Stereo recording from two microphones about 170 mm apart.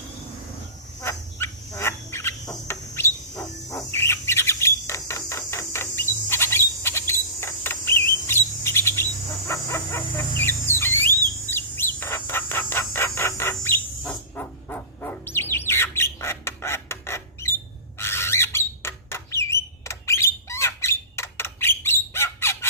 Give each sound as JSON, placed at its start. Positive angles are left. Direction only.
{"t": 1.0, "sound": "fowl", "side_deg": 15}
{"t": 2.6, "sound": "bird", "side_deg": 15}
{"t": 9.5, "sound": "a sound", "side_deg": 15}
{"t": 11.5, "sound": "bird", "side_deg": 15}
{"t": 18.0, "sound": "squeak", "side_deg": 15}